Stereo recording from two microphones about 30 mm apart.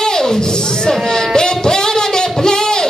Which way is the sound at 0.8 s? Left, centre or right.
Left.